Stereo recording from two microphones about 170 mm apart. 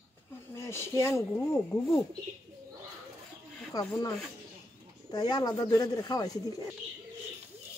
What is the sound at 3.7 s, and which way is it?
Speech, 20° left (ahead or behind).